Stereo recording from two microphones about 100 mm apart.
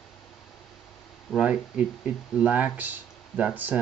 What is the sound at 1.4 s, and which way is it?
Speech, 10° right (ahead or behind).